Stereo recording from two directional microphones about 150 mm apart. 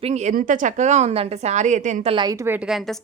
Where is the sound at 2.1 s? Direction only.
25° right (ahead or behind).